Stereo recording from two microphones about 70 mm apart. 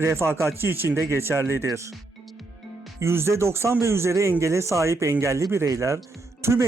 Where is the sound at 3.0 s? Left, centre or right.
Right.